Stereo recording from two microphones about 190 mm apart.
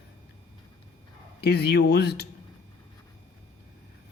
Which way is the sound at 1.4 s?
60° left (ahead or behind).